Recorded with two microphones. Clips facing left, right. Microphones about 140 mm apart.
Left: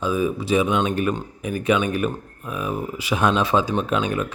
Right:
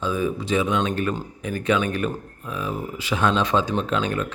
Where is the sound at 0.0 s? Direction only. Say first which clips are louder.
Left 2 dB; 10° left (ahead or behind).